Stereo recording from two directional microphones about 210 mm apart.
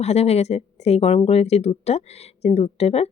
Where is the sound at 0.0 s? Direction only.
30° left (ahead or behind).